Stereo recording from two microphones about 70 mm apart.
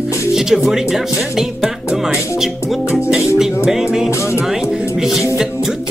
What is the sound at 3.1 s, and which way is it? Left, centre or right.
Music, centre.